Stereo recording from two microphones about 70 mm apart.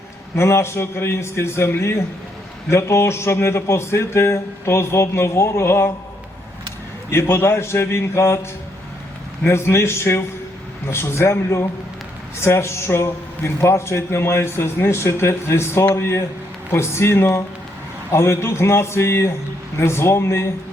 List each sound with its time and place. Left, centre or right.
0.3 s a man's voice: left
7.1 s a man's voice: left
9.5 s a man's voice: left